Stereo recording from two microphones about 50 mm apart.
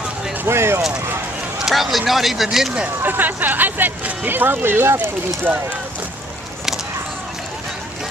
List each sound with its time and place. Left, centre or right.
0.5 s a sound: right
1.6 s speech: centre
3.0 s speech: right